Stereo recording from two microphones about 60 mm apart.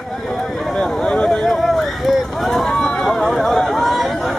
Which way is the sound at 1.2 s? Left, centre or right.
Centre.